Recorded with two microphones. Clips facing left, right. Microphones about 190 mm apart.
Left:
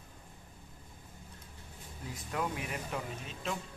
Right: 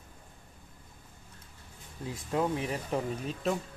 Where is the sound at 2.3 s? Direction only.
30° right (ahead or behind).